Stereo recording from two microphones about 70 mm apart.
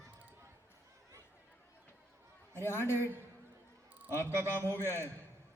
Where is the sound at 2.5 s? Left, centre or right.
Left.